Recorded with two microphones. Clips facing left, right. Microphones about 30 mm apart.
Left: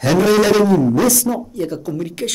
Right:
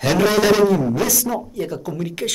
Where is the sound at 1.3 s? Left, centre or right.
Centre.